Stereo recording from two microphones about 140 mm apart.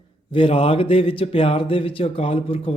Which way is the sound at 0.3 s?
40° left (ahead or behind).